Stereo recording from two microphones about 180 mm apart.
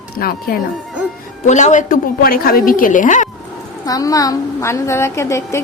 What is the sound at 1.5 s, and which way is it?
A woman's voice, 40° left (ahead or behind).